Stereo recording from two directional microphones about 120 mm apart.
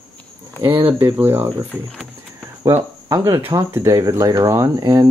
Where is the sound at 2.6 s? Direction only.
30° right (ahead or behind).